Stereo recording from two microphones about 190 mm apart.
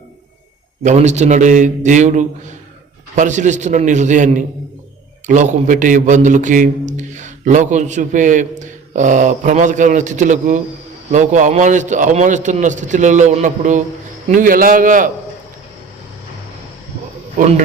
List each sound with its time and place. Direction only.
0.8 s a man's voice: 40° right (ahead or behind)